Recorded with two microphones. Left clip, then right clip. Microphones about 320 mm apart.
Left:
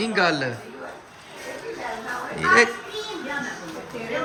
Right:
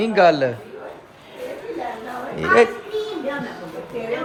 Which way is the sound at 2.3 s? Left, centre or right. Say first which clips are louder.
Right 2 dB; centre.